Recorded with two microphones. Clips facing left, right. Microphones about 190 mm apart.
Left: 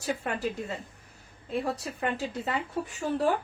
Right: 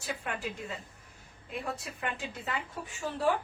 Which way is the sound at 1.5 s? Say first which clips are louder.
Left 7 dB; 35° left (ahead or behind).